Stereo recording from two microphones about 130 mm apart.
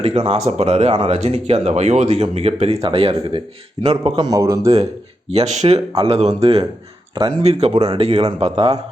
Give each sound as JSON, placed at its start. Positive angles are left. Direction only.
{"t": 0.0, "sound": "speech", "side_deg": -50}
{"t": 4.3, "sound": "speech", "side_deg": -25}
{"t": 5.3, "sound": "speech", "side_deg": -60}
{"t": 7.1, "sound": "speech", "side_deg": -35}
{"t": 7.4, "sound": "speech", "side_deg": -55}